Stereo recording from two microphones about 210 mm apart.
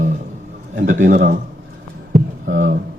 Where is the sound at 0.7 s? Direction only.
40° right (ahead or behind).